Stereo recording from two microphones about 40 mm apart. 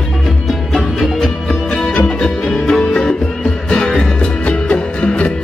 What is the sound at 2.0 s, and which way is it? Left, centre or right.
Music, left.